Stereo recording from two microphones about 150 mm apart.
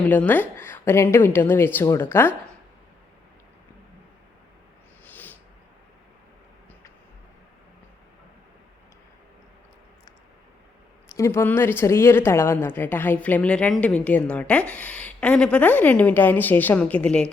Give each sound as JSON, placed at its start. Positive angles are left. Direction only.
{"t": 0.1, "sound": "speech", "side_deg": 10}
{"t": 5.0, "sound": "a sound", "side_deg": 10}
{"t": 11.1, "sound": "speech", "side_deg": 20}